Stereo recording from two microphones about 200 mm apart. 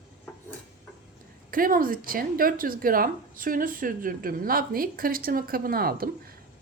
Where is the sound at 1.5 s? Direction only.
45° right (ahead or behind).